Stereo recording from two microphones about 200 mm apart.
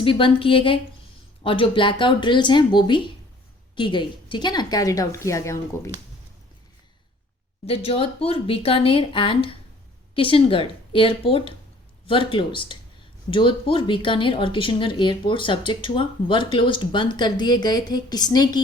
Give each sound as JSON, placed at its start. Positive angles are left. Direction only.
{"t": 0.0, "sound": "a woman's voice", "side_deg": 25}
{"t": 7.7, "sound": "a woman's voice", "side_deg": 30}